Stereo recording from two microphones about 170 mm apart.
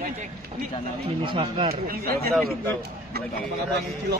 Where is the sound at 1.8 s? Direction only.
60° right (ahead or behind).